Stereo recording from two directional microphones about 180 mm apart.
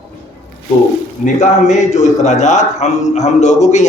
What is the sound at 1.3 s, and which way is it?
A man's voice, 40° left (ahead or behind).